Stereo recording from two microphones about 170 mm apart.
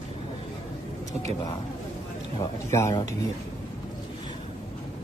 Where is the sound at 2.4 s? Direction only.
15° left (ahead or behind).